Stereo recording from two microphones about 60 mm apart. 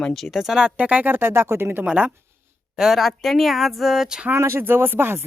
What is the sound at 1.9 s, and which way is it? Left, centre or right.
Speech, centre.